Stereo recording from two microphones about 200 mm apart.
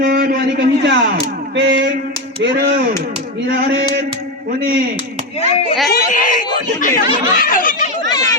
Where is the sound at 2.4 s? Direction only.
45° right (ahead or behind).